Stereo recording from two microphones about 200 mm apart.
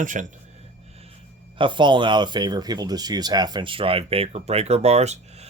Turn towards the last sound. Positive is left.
turn(degrees=-35)  # may be behind; listen again after turning